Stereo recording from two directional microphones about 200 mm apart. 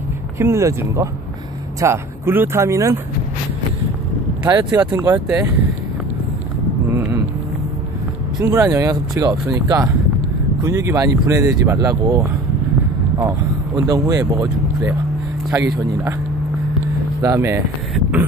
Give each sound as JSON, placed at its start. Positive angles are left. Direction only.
{"t": 0.4, "sound": "speech", "side_deg": -15}
{"t": 4.7, "sound": "speech", "side_deg": -20}
{"t": 6.9, "sound": "a sound", "side_deg": -15}
{"t": 8.4, "sound": "speech", "side_deg": -15}
{"t": 13.2, "sound": "speech", "side_deg": -15}
{"t": 17.2, "sound": "speech", "side_deg": -15}